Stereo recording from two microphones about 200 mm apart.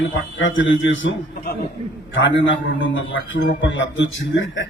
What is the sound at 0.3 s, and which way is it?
A man's voice, 70° left (ahead or behind).